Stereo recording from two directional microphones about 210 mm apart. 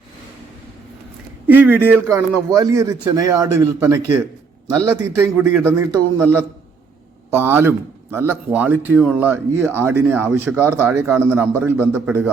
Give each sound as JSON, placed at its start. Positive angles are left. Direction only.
{"t": 1.5, "sound": "speech", "side_deg": -10}
{"t": 7.3, "sound": "speech", "side_deg": -10}